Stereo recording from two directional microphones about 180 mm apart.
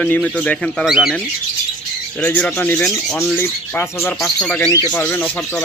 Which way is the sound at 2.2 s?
10° left (ahead or behind).